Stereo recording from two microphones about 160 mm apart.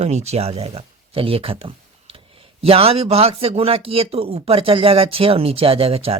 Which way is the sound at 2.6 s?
40° right (ahead or behind).